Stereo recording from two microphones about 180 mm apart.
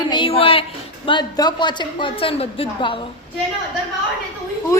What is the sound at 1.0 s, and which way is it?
A woman's voice, 25° left (ahead or behind).